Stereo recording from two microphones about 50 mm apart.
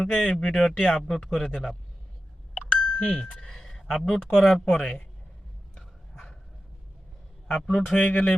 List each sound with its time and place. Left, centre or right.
0.0 s a man's voice: centre
2.7 s music: centre
4.1 s a man's voice: centre
5.7 s a sound: centre
7.4 s speech: centre